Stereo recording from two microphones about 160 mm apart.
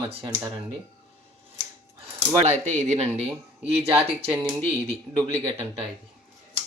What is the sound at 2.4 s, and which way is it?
Speech, 45° right (ahead or behind).